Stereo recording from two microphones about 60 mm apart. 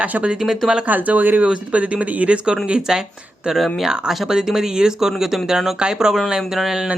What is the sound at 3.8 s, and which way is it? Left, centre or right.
Speech, centre.